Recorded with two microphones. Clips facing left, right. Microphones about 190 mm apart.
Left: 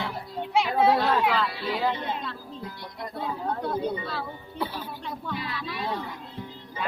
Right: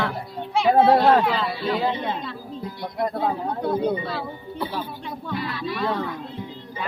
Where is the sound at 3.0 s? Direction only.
65° right (ahead or behind).